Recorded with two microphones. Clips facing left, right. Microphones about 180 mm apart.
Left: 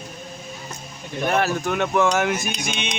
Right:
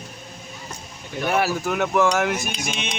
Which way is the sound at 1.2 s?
10° right (ahead or behind).